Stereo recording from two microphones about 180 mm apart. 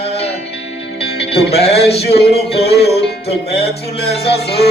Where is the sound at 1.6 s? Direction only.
35° left (ahead or behind).